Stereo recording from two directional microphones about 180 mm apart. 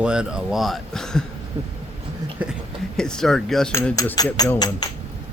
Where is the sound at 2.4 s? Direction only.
10° right (ahead or behind).